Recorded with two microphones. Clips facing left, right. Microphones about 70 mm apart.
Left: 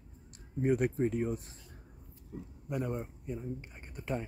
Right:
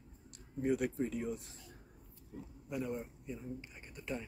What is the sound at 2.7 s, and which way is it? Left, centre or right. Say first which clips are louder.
Speech: left 4 dB; left.